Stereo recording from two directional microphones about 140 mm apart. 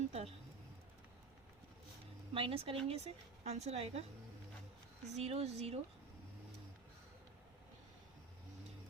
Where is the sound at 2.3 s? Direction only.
40° right (ahead or behind).